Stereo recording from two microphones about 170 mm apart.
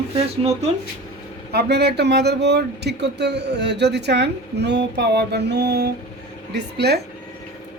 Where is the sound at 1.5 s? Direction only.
75° right (ahead or behind).